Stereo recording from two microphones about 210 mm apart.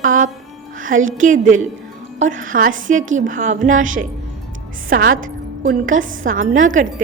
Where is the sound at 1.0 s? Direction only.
70° right (ahead or behind).